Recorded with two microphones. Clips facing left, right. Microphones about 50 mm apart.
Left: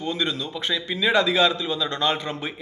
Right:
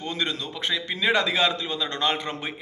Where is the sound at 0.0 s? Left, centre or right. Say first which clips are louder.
Left 3 dB; right.